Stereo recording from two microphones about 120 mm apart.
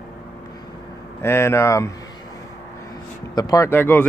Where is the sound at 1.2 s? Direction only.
20° left (ahead or behind).